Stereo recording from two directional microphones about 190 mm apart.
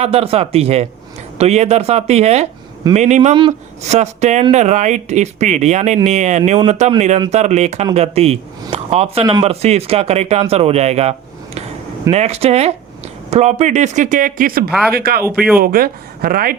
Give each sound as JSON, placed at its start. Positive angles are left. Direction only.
{"t": 0.0, "sound": "speech", "side_deg": -30}
{"t": 12.1, "sound": "speech", "side_deg": -35}
{"t": 15.2, "sound": "speech", "side_deg": -5}
{"t": 15.5, "sound": "speech", "side_deg": -50}